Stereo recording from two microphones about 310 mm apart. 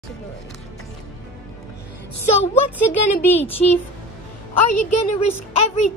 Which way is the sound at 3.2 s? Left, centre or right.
Centre.